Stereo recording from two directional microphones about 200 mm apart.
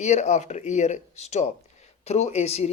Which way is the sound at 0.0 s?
35° left (ahead or behind).